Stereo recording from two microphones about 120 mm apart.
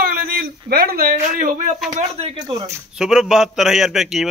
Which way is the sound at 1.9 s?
60° right (ahead or behind).